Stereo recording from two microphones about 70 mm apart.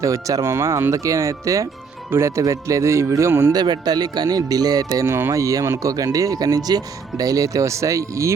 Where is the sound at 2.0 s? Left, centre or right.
Right.